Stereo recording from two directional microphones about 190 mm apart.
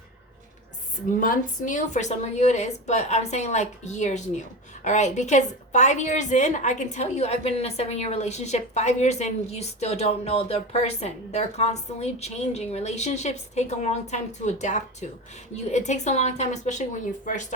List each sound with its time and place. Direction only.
1.2 s a woman's voice: 45° left (ahead or behind)